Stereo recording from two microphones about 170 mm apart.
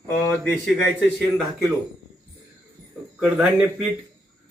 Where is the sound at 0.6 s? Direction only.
5° right (ahead or behind).